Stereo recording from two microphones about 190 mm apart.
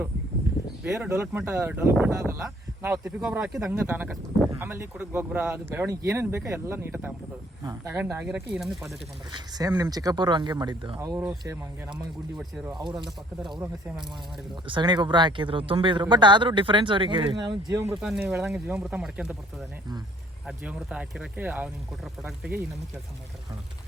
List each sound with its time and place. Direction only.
0.9 s speech: 15° right (ahead or behind)
9.3 s speech: 20° right (ahead or behind)
12.4 s speech: centre (ahead or behind)
12.8 s speech: 25° right (ahead or behind)
14.7 s speech: 25° right (ahead or behind)
18.0 s speech: centre (ahead or behind)
20.5 s speech: 5° right (ahead or behind)